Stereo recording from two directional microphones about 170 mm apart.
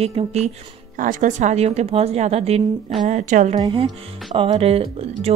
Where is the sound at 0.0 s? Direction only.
35° right (ahead or behind).